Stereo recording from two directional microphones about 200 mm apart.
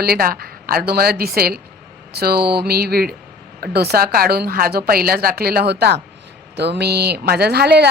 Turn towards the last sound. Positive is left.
turn(degrees=-55)  # may be behind; listen again after turning